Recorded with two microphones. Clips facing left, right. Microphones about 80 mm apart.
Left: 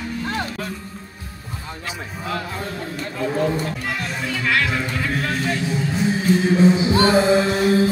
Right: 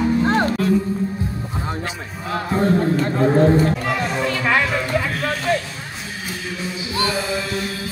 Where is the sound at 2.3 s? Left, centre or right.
Right.